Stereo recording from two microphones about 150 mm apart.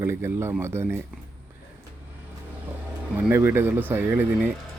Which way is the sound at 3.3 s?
15° right (ahead or behind).